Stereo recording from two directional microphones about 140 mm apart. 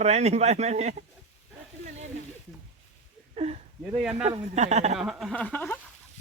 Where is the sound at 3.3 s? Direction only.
50° right (ahead or behind).